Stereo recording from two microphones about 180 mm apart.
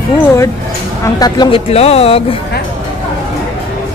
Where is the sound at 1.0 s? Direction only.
20° left (ahead or behind).